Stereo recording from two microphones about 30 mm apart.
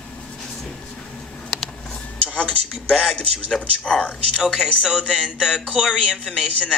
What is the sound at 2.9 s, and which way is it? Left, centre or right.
Speech, centre.